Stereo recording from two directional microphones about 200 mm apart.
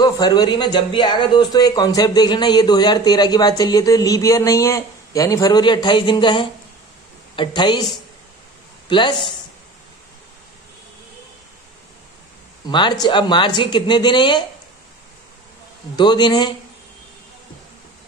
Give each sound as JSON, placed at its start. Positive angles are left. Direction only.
{"t": 0.0, "sound": "speech", "side_deg": 20}
{"t": 8.8, "sound": "speech", "side_deg": 25}
{"t": 12.6, "sound": "speech", "side_deg": 20}
{"t": 16.0, "sound": "speech", "side_deg": 20}